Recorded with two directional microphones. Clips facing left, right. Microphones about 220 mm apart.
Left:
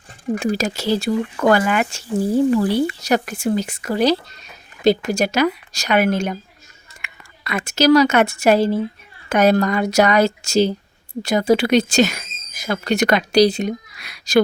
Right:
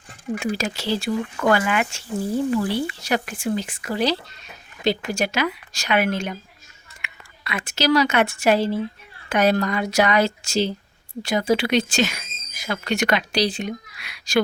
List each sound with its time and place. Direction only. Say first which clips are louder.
0.3 s a woman's voice: left 4 dB; 40° left (ahead or behind)